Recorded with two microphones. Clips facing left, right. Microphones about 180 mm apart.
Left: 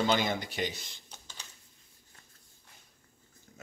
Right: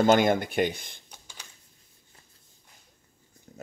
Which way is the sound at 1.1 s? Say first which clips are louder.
Right 1 dB; 10° right (ahead or behind).